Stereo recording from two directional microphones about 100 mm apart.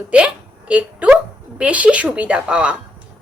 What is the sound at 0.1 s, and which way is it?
A woman's voice, 10° right (ahead or behind).